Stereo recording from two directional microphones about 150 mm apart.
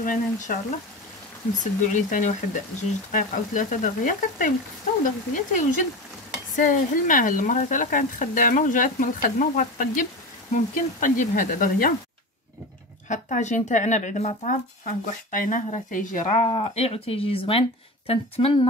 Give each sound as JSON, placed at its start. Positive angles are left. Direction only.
{"t": 0.0, "sound": "speech", "side_deg": 65}
{"t": 13.1, "sound": "speech", "side_deg": 55}
{"t": 16.4, "sound": "speech", "side_deg": 40}